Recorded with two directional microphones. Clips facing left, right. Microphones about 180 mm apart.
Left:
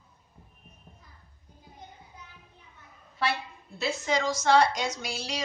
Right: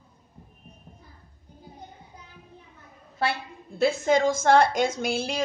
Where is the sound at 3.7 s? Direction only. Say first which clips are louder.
Right 7 dB; 50° right (ahead or behind).